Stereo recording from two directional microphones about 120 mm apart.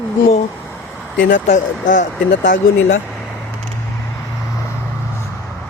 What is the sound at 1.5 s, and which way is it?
Speech, 90° left.